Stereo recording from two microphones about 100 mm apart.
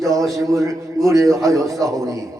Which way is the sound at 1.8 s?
35° right (ahead or behind).